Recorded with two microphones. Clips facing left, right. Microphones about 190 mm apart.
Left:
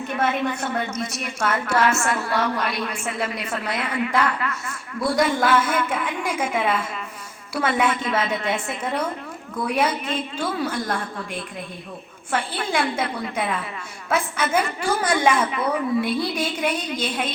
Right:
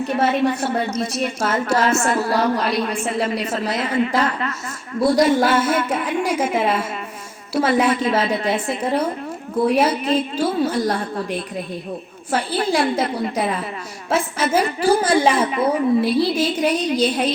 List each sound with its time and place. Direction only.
0.1 s a woman's voice: 35° right (ahead or behind)